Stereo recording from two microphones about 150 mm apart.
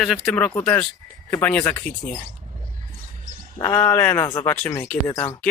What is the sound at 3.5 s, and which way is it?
Speech, 25° left (ahead or behind).